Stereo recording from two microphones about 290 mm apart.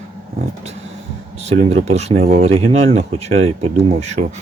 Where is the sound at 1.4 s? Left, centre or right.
Right.